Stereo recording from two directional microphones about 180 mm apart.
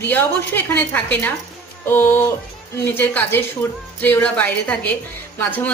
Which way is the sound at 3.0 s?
10° left (ahead or behind).